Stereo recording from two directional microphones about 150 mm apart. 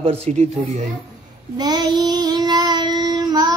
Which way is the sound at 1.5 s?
25° right (ahead or behind).